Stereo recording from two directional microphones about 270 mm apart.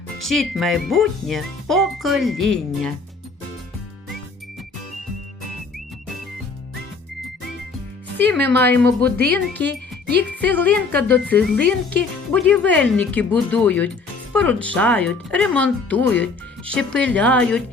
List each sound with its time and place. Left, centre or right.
0.2 s speech: centre
8.6 s speech: centre
9.1 s speech: right
10.4 s speech: centre